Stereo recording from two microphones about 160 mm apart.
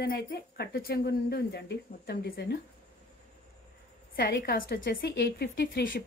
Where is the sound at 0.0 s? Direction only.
80° left.